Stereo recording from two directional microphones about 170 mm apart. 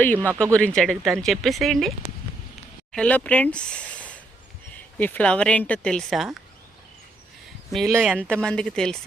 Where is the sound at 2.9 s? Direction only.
5° left (ahead or behind).